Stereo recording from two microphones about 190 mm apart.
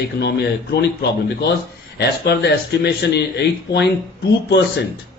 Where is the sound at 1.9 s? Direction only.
60° left (ahead or behind).